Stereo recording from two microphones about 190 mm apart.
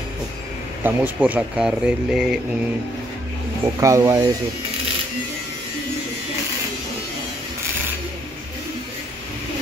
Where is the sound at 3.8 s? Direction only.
15° right (ahead or behind).